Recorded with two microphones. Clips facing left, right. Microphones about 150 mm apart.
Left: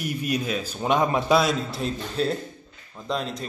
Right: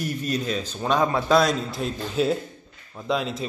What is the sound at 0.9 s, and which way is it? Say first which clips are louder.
Speech: even; 20° left (ahead or behind).